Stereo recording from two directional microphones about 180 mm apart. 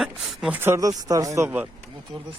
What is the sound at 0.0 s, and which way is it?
Speech, centre (ahead or behind).